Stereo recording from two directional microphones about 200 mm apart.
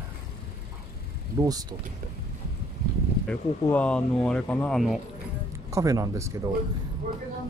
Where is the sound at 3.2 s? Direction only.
5° left (ahead or behind).